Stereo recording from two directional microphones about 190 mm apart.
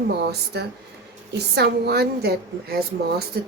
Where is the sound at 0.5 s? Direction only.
60° right (ahead or behind).